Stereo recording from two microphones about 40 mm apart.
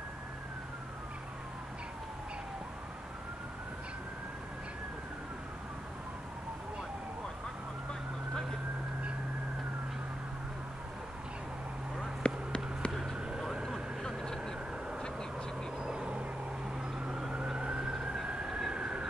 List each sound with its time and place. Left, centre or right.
12.2 s a sound: left
13.4 s vehicle: centre
14.0 s vehicle: centre
15.8 s vehicle: centre
17.3 s emergency vehicle: right
17.9 s emergency vehicle: centre
18.3 s vehicle: centre
18.7 s train: centre